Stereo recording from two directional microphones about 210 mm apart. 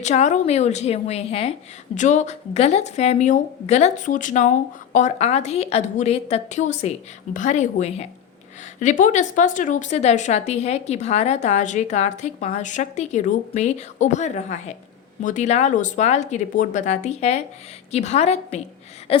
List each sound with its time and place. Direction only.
0.0 s speech: 35° left (ahead or behind)